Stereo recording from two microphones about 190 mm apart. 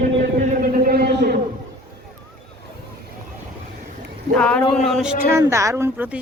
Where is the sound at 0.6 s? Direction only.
50° right (ahead or behind).